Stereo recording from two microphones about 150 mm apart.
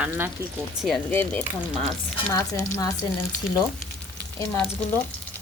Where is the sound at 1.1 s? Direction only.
10° left (ahead or behind).